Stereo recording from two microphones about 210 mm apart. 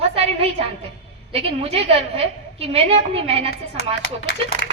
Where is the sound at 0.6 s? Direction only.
30° right (ahead or behind).